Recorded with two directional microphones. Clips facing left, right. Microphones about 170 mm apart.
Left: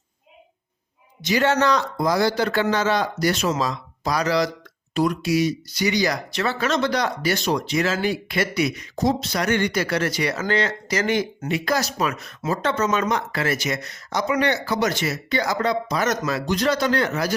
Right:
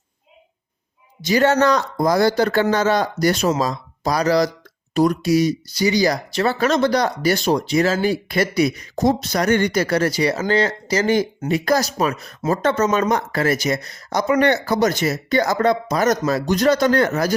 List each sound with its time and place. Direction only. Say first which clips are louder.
1.2 s speech: right 4 dB; 40° right (ahead or behind)